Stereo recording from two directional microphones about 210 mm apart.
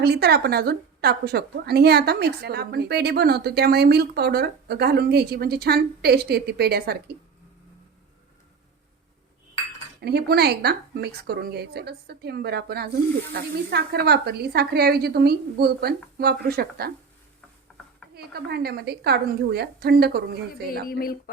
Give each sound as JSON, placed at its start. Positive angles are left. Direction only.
{"t": 0.0, "sound": "a woman's voice", "side_deg": -50}
{"t": 10.0, "sound": "a woman's voice", "side_deg": -50}
{"t": 18.1, "sound": "a woman's voice", "side_deg": -50}
{"t": 20.8, "sound": "speech", "side_deg": 45}